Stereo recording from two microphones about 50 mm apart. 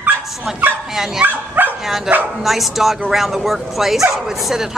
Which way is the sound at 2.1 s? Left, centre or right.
Centre.